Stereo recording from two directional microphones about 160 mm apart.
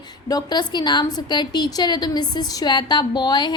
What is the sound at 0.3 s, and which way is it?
A woman's voice, 25° left (ahead or behind).